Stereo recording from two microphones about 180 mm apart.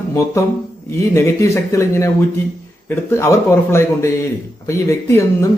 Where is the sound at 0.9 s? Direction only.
15° left (ahead or behind).